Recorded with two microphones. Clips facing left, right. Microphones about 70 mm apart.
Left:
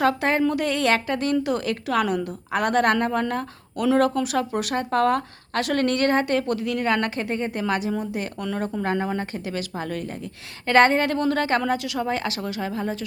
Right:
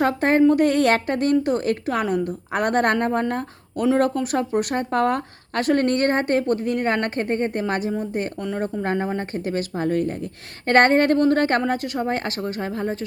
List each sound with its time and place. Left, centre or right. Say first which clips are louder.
0.0 s a woman's voice: right 4 dB; right
2.2 s a woman's voice: right 1 dB; right
8.4 s a woman's voice: right 1 dB; right
9.3 s a woman's voice: right 4 dB; right